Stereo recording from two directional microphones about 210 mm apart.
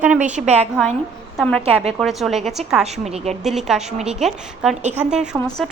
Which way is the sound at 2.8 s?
30° right (ahead or behind).